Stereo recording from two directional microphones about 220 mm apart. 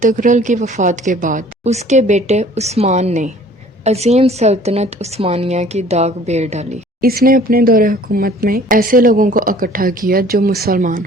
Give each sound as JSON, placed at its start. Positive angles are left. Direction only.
{"t": 0.0, "sound": "a woman's voice", "side_deg": -35}